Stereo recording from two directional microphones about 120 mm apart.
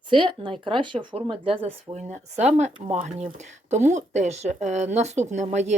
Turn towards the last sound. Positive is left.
turn(degrees=-70)  # may be behind; listen again after turning